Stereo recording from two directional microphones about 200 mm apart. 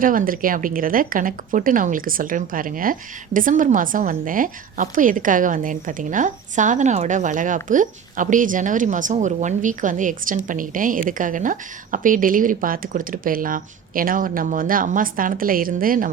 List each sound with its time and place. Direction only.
0.0 s speech: 45° right (ahead or behind)